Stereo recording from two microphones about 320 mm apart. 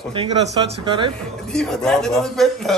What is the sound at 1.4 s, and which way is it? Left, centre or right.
A man's voice, centre.